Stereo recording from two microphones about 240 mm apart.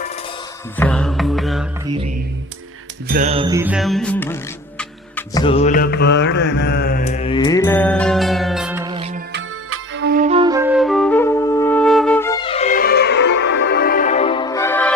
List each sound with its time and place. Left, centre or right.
0.8 s music: centre
1.9 s mantra: right
3.1 s music: right
3.3 s music: centre
5.4 s mantra: left
7.0 s music: left; by 8.8 s centre
8.8 s music: right
9.3 s music: right
10.0 s music: right
10.2 s music: right; by 14.9 s centre